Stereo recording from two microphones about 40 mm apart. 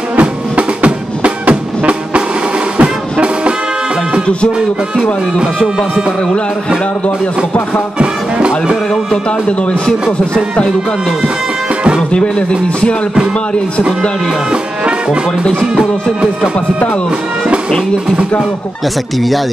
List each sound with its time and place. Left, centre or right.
0.2 s music: right
8.0 s speech: right
9.6 s speech: left
12.1 s speech: left
14.5 s music: right
15.7 s speech: centre
19.1 s speech: centre